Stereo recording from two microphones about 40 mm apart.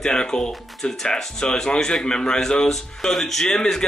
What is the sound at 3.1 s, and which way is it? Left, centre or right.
Speech, centre.